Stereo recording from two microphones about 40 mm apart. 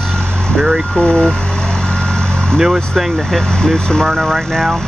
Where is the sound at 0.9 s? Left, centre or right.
Centre.